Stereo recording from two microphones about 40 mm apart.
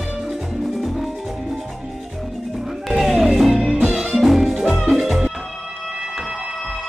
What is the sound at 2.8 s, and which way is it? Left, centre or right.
Music, centre.